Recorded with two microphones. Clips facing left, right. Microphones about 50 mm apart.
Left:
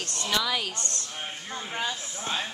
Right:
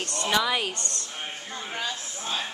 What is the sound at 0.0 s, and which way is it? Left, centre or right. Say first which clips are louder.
Speech: right 3 dB; right.